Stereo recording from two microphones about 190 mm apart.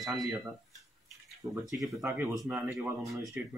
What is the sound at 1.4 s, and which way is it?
Speech, 20° right (ahead or behind).